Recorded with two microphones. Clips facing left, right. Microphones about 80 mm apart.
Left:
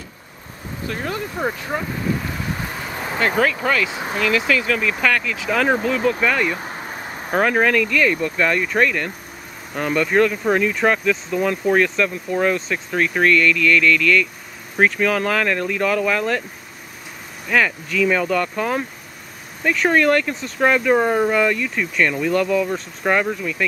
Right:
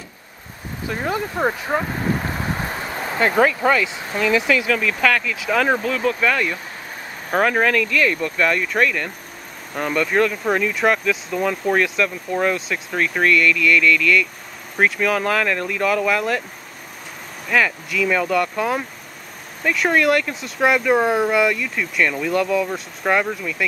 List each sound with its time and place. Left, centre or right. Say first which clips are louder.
0.8 s speech: right 3 dB; centre
3.2 s speech: right 2 dB; centre
4.6 s speech: right 1 dB; centre
17.5 s speech: even; centre